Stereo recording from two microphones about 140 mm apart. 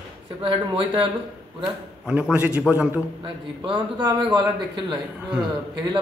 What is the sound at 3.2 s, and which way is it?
A man's voice, 35° right (ahead or behind).